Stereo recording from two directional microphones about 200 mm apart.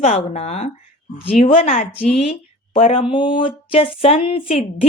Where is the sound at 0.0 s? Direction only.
35° left (ahead or behind).